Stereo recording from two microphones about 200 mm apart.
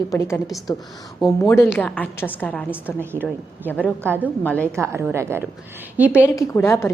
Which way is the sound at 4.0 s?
10° right (ahead or behind).